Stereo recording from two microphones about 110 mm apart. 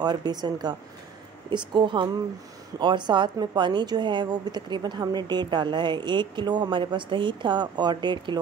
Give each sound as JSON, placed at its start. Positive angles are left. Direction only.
{"t": 0.0, "sound": "a woman's voice", "side_deg": -40}